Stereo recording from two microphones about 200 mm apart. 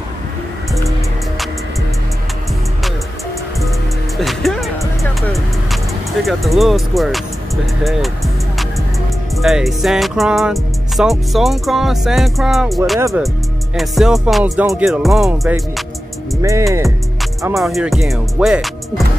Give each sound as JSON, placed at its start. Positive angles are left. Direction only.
{"t": 4.2, "sound": "music", "side_deg": 0}
{"t": 9.4, "sound": "music", "side_deg": 0}
{"t": 16.3, "sound": "speech", "side_deg": -15}
{"t": 17.6, "sound": "music", "side_deg": 0}